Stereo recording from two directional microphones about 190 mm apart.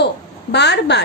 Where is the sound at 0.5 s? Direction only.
65° left (ahead or behind).